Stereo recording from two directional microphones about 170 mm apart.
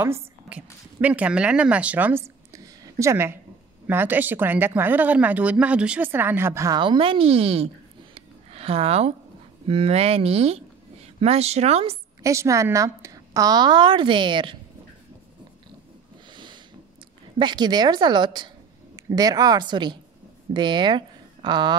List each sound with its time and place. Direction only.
0.0 s a woman's voice: 10° right (ahead or behind)
6.8 s speech: 30° right (ahead or behind)
12.2 s a woman's voice: 20° right (ahead or behind)
17.4 s a woman's voice: 25° right (ahead or behind)